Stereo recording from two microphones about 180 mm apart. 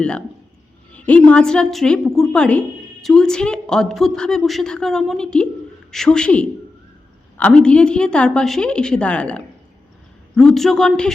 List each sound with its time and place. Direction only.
0.9 s a woman's voice: 5° left (ahead or behind)